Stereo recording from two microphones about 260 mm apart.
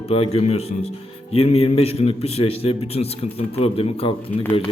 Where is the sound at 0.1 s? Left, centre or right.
Left.